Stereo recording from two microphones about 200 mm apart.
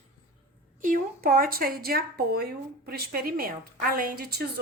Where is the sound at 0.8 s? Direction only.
45° right (ahead or behind).